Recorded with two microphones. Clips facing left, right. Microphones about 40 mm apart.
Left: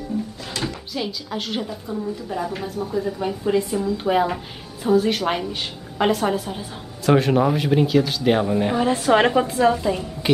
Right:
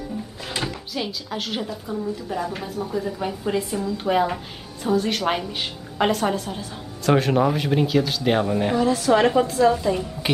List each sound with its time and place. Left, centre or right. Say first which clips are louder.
0.1 s a sound: left 9 dB; centre
0.7 s a woman's voice: left 1 dB; centre
8.7 s a woman's voice: left 1 dB; left
9.7 s speech: even; centre